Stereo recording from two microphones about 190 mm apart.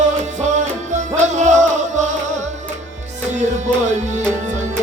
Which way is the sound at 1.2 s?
40° right (ahead or behind).